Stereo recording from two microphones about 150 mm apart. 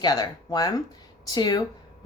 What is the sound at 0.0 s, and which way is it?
Speech, 25° left (ahead or behind).